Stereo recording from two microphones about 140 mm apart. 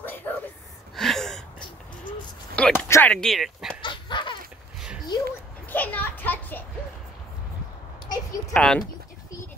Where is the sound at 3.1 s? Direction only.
5° left (ahead or behind).